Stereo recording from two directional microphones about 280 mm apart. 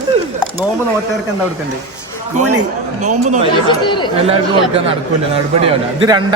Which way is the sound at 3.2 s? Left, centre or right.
Right.